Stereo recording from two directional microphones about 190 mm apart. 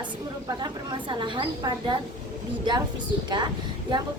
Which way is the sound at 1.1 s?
25° right (ahead or behind).